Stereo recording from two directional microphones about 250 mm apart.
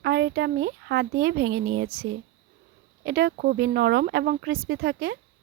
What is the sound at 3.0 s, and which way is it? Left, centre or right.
Speech, right.